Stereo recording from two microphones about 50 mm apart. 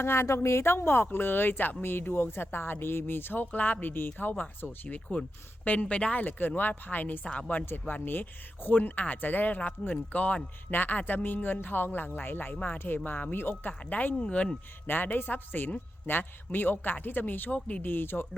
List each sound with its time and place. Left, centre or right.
0.0 s speech: left
7.3 s speech: left
7.6 s speech: left
14.2 s speech: left
14.8 s speech: left
17.9 s speech: left